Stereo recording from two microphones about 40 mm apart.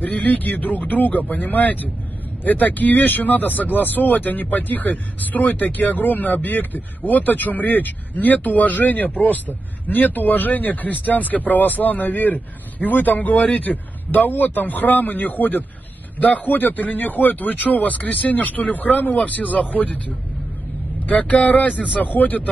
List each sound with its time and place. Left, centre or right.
0.0 s speech: left
21.0 s speech: left